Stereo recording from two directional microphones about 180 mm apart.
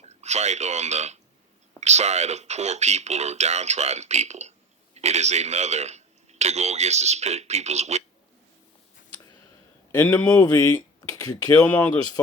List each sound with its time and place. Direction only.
0.1 s a man's voice: 40° right (ahead or behind)
9.9 s speech: 10° left (ahead or behind)
10.4 s speech: 20° left (ahead or behind)
11.6 s speech: 10° left (ahead or behind)